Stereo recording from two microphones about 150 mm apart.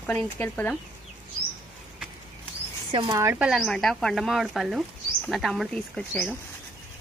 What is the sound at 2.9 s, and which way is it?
Speech, 35° right (ahead or behind).